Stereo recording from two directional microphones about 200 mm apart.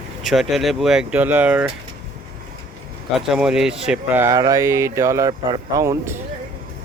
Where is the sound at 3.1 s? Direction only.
Centre (ahead or behind).